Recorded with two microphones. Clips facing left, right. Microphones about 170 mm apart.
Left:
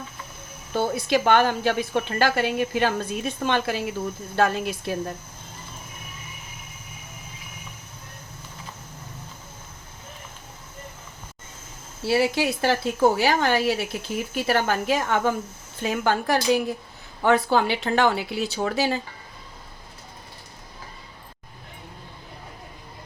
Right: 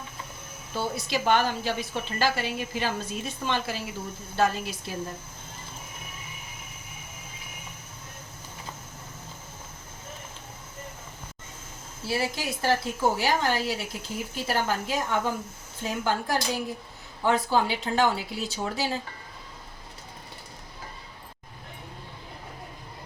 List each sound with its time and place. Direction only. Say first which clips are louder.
0.7 s a woman's voice: left 7 dB; 55° left (ahead or behind)
12.0 s a woman's voice: left 8 dB; 70° left (ahead or behind)